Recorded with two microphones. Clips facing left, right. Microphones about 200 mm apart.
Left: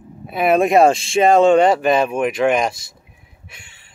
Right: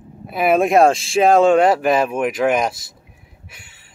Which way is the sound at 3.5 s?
5° right (ahead or behind).